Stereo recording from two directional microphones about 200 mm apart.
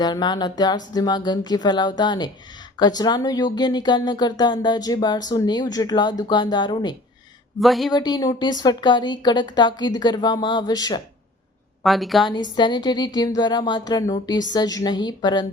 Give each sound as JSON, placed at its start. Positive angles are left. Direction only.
{"t": 0.0, "sound": "speech", "side_deg": 20}
{"t": 7.6, "sound": "a woman's voice", "side_deg": 0}
{"t": 7.9, "sound": "speech", "side_deg": 20}
{"t": 11.8, "sound": "a woman's voice", "side_deg": 0}
{"t": 12.3, "sound": "speech", "side_deg": 20}